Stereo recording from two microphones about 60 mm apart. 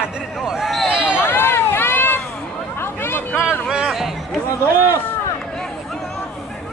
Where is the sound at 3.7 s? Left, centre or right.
Centre.